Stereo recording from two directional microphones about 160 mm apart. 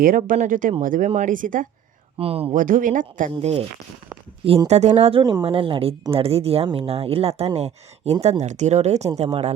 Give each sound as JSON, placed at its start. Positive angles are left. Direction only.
{"t": 0.0, "sound": "speech", "side_deg": -60}
{"t": 2.1, "sound": "speech", "side_deg": -40}
{"t": 2.6, "sound": "speech", "side_deg": -55}
{"t": 4.7, "sound": "speech", "side_deg": -45}
{"t": 5.2, "sound": "speech", "side_deg": -25}